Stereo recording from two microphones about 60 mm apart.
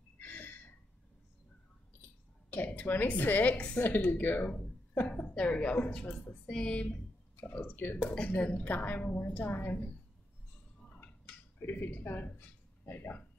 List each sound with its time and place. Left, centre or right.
0.2 s a sound: left
2.5 s a woman's voice: left
3.8 s a woman's voice: left
7.6 s speech: left
8.0 s a woman's voice: centre; by 9.8 s left
11.6 s speech: left